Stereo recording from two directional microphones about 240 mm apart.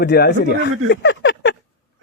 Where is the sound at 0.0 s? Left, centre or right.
Left.